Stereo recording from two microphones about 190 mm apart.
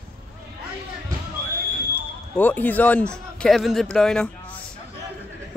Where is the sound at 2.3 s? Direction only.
10° left (ahead or behind).